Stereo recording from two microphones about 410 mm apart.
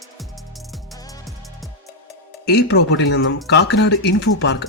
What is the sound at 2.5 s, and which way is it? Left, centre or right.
Speech, left.